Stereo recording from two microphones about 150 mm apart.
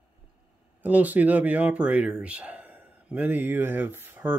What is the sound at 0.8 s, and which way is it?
Speech, 10° right (ahead or behind).